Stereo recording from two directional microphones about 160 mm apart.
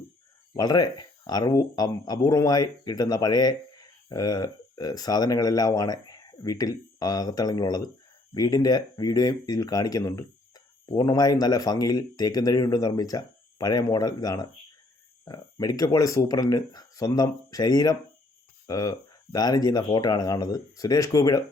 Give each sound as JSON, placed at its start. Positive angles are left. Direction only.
{"t": 0.5, "sound": "speech", "side_deg": 25}